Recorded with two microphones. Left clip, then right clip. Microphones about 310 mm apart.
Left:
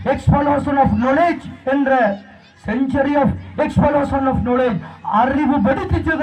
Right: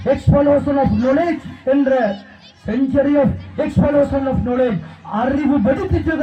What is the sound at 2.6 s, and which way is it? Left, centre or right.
A man's voice, left.